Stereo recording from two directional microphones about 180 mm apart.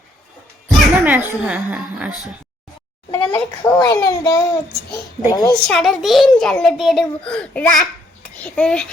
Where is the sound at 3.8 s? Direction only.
20° left (ahead or behind).